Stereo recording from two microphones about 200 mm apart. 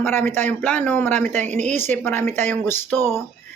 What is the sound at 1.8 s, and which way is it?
Speech, 10° left (ahead or behind).